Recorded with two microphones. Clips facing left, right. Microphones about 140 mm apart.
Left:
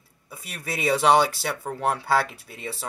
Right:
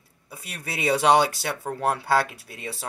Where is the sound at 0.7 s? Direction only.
15° right (ahead or behind).